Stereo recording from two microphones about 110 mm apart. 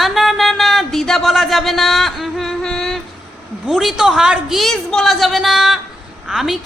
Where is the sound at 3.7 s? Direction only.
Centre (ahead or behind).